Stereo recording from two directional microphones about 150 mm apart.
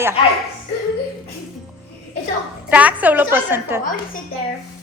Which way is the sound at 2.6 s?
10° right (ahead or behind).